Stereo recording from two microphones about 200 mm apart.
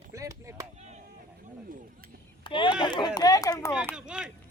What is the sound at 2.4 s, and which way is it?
Speech, 25° left (ahead or behind).